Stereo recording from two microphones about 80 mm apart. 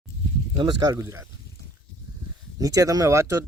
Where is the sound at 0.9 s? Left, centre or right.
Right.